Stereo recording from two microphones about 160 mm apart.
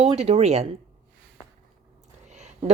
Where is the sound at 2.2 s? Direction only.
45° right (ahead or behind).